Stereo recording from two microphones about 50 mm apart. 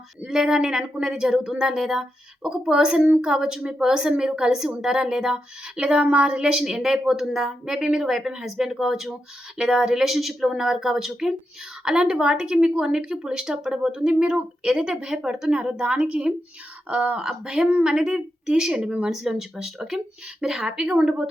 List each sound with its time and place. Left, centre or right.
0.3 s a woman's voice: centre
17.2 s a woman's voice: centre